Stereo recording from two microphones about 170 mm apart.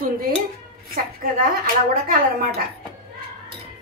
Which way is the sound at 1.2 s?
55° right (ahead or behind).